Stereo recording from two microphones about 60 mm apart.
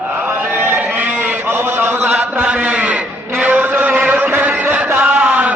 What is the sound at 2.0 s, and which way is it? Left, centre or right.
Mantra, right.